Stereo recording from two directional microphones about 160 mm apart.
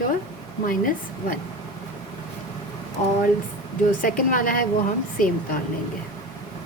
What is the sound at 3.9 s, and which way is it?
Speech, 60° left (ahead or behind).